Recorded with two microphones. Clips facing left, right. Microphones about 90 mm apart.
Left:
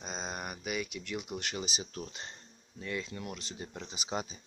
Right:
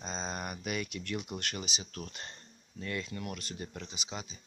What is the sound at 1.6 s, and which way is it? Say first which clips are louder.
Speech: left 2 dB; 35° left (ahead or behind).